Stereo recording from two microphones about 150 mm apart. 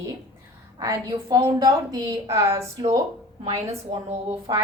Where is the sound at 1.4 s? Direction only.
20° right (ahead or behind).